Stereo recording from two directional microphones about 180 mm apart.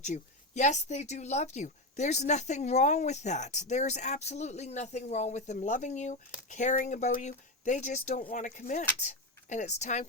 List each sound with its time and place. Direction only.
0.0 s speech: 40° left (ahead or behind)